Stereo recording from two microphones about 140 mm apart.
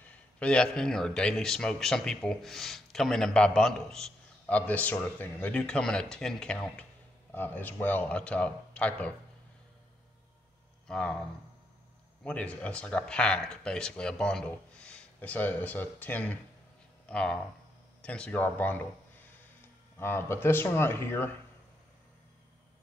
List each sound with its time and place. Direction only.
0.0 s a man's voice: 10° left (ahead or behind)
10.9 s speech: 5° left (ahead or behind)
12.2 s speech: 10° left (ahead or behind)